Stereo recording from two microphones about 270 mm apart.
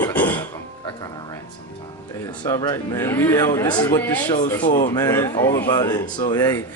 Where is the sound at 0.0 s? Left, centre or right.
Centre.